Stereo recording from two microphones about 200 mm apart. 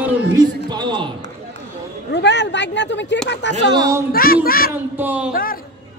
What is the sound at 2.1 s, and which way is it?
Speech, 60° left (ahead or behind).